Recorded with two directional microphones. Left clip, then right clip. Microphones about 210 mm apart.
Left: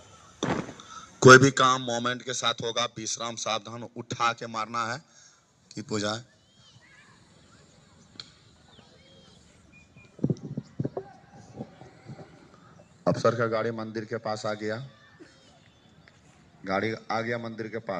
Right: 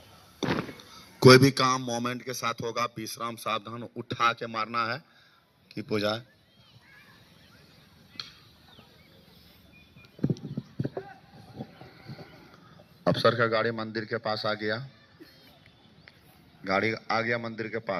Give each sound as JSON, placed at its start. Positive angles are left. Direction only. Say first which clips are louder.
{"t": 0.9, "sound": "a man's voice", "louder": "left 3 dB", "side_deg": -45}
{"t": 10.2, "sound": "a sound", "louder": "left 1 dB", "side_deg": -20}
{"t": 13.1, "sound": "a man's voice", "louder": "right 1 dB", "side_deg": -10}
{"t": 13.6, "sound": "a man's voice", "louder": "right 2 dB", "side_deg": 10}
{"t": 16.6, "sound": "a man's voice", "louder": "right 2 dB", "side_deg": 15}